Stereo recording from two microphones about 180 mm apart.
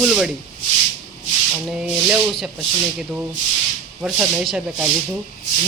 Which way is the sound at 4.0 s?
5° right (ahead or behind).